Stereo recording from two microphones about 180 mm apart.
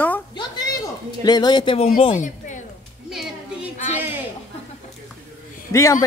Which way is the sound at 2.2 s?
45° left (ahead or behind).